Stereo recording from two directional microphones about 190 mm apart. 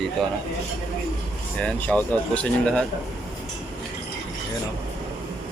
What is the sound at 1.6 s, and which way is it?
Speech, 5° left (ahead or behind).